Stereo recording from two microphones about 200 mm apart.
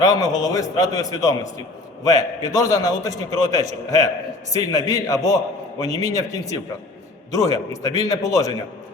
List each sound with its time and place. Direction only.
0.0 s a man's voice: 20° left (ahead or behind)